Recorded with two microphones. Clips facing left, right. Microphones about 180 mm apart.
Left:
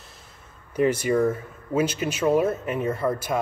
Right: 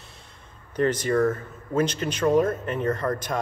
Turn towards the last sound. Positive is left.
turn(degrees=10)  # may be behind; listen again after turning